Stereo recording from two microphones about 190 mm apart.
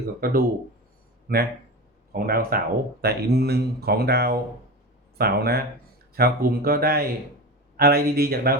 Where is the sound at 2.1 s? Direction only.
50° right (ahead or behind).